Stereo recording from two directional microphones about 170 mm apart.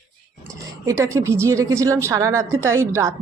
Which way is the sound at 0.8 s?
15° right (ahead or behind).